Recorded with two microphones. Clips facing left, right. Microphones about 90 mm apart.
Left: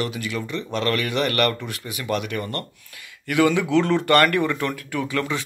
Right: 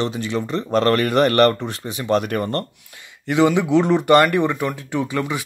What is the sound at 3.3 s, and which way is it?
Speech, 20° right (ahead or behind).